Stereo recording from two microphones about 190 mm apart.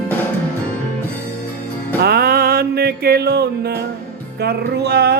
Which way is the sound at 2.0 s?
55° right (ahead or behind).